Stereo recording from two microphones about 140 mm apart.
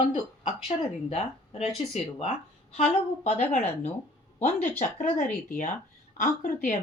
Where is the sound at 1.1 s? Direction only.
45° left (ahead or behind).